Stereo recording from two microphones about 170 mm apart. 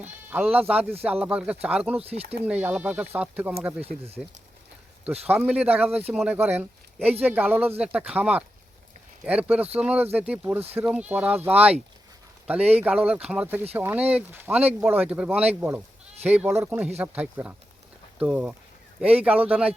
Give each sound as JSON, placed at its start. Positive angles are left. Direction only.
{"t": 0.0, "sound": "speech", "side_deg": -10}
{"t": 2.0, "sound": "speech", "side_deg": -35}
{"t": 2.3, "sound": "speech", "side_deg": -10}